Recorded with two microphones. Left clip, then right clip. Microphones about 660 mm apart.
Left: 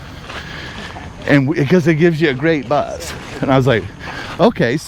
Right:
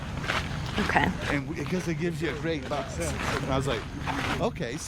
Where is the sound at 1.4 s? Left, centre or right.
Left.